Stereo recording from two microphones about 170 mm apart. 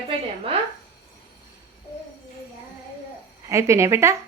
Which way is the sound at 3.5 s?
15° right (ahead or behind).